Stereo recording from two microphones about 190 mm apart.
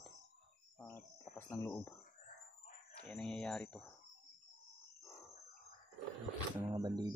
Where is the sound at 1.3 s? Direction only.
20° left (ahead or behind).